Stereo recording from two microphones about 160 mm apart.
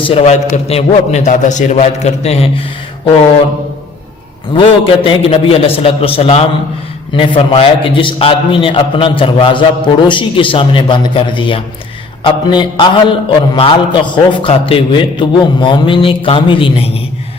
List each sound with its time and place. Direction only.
0.0 s a man's voice: 40° left (ahead or behind)
4.5 s a man's voice: 35° left (ahead or behind)